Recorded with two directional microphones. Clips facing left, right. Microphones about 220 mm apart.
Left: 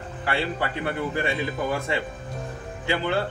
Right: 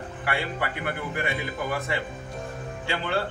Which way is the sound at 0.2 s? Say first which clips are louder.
Left 3 dB; 30° left (ahead or behind).